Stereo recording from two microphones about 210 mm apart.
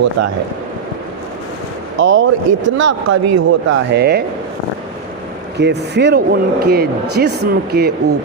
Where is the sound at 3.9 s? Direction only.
50° right (ahead or behind).